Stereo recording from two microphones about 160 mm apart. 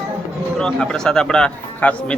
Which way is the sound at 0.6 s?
5° left (ahead or behind).